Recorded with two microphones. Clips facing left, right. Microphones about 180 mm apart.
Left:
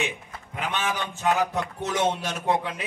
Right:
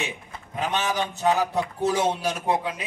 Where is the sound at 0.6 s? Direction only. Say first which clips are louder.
Right 3 dB; 40° right (ahead or behind).